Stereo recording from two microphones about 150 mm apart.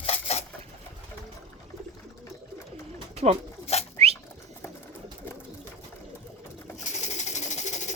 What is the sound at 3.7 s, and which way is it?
Bird, 45° left (ahead or behind).